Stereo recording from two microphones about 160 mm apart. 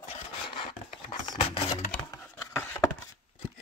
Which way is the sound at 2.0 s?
20° left (ahead or behind).